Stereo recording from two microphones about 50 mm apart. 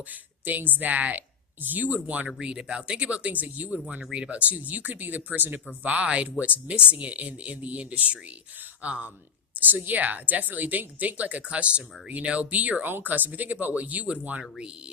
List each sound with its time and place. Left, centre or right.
0.1 s a woman's voice: right
2.4 s a woman's voice: centre